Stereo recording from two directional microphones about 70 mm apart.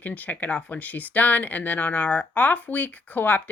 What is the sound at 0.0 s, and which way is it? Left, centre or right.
Speech, left.